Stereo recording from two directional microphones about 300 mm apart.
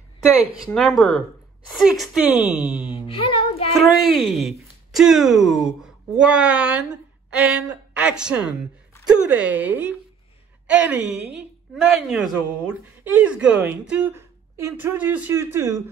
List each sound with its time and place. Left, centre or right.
0.6 s a woman's voice: centre
3.1 s speech: centre
3.7 s a woman's voice: centre